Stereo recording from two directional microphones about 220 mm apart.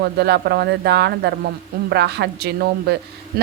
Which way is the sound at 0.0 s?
50° right (ahead or behind).